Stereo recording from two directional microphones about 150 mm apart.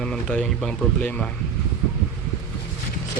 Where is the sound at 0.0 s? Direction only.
5° left (ahead or behind).